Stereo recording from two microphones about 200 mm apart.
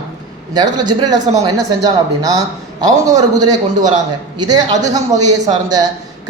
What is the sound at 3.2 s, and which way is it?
A man's voice, 20° right (ahead or behind).